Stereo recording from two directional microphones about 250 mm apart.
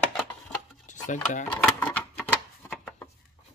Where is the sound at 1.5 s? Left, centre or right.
Centre.